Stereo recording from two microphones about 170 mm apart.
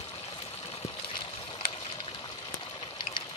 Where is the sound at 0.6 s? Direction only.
35° left (ahead or behind).